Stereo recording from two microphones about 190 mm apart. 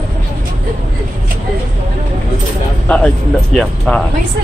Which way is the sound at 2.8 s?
5° left (ahead or behind).